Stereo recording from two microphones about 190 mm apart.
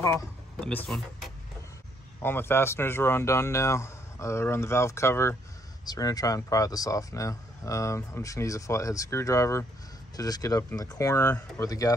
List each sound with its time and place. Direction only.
0.0 s speech: 15° left (ahead or behind)
0.6 s speech: 5° left (ahead or behind)
2.2 s speech: 10° left (ahead or behind)